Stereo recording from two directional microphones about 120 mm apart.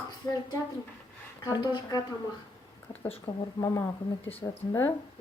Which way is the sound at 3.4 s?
35° left (ahead or behind).